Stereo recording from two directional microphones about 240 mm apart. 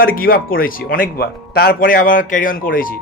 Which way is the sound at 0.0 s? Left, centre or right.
Left.